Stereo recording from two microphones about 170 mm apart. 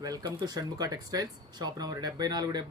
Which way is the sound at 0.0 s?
20° right (ahead or behind).